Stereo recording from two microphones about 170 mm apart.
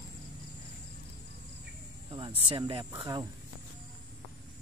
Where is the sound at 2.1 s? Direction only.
30° right (ahead or behind).